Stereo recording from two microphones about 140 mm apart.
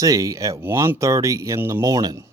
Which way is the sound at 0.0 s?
25° right (ahead or behind).